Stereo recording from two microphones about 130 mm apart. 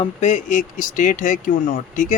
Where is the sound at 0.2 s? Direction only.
70° left (ahead or behind).